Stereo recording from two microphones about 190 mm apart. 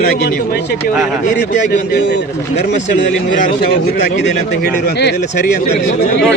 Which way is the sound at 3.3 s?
45° left (ahead or behind).